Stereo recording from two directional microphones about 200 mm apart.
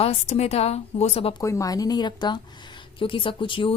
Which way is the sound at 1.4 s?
15° left (ahead or behind).